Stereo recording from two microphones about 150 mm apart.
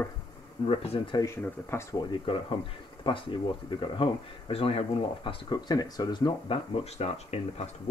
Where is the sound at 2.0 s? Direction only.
35° left (ahead or behind).